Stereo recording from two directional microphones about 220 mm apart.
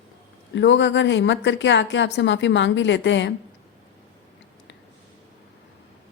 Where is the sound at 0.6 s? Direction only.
55° left (ahead or behind).